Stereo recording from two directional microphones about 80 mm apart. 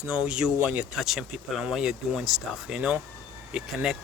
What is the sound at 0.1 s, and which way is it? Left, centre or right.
Speech, centre.